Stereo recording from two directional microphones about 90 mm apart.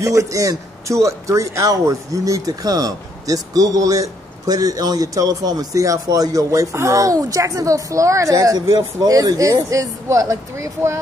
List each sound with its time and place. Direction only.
0.0 s a man's voice: 35° right (ahead or behind)